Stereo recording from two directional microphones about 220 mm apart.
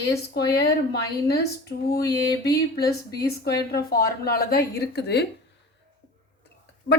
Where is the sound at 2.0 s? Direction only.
15° left (ahead or behind).